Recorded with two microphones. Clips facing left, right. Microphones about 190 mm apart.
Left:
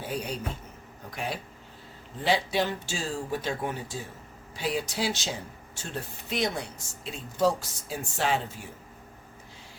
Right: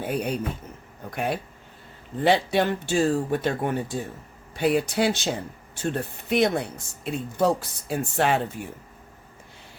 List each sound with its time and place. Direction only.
0.0 s speech: 55° right (ahead or behind)